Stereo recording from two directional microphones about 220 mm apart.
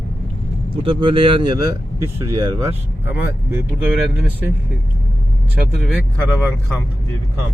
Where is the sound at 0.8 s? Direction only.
25° right (ahead or behind).